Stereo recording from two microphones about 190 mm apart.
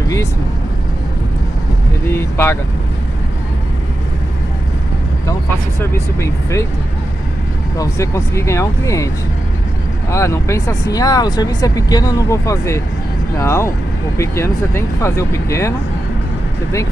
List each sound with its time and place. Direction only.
2.0 s speech: 15° left (ahead or behind)
5.8 s speech: 15° left (ahead or behind)
7.7 s speech: 15° left (ahead or behind)
10.1 s speech: 15° left (ahead or behind)